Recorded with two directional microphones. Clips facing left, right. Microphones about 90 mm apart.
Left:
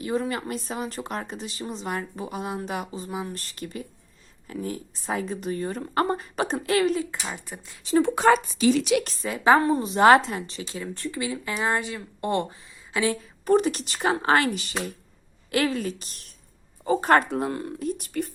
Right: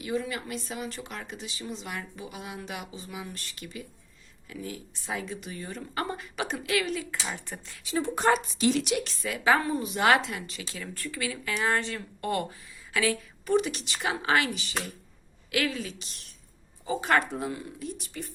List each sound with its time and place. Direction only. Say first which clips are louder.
0.0 s speech: left 4 dB; 40° left (ahead or behind)
7.3 s speech: left 1 dB; 10° left (ahead or behind)
8.0 s speech: left 5 dB; 90° left
9.0 s speech: left 4 dB; 30° left (ahead or behind); by 12.0 s 15° left (ahead or behind)
12.2 s speech: left 4 dB; 25° left (ahead or behind)
13.4 s speech: left 5 dB; 40° left (ahead or behind)
17.3 s speech: left 6 dB; 55° left (ahead or behind)